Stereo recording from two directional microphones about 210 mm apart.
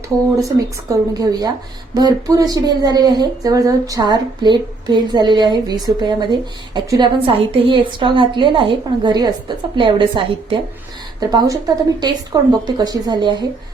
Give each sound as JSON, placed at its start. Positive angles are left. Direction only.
{"t": 0.3, "sound": "speech", "side_deg": -15}